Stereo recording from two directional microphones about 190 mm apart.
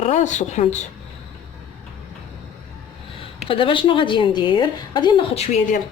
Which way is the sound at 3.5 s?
25° left (ahead or behind).